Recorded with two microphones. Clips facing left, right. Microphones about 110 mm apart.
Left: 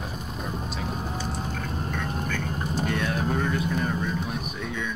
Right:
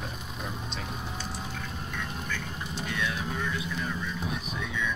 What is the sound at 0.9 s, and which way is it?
Vehicle, 45° left (ahead or behind).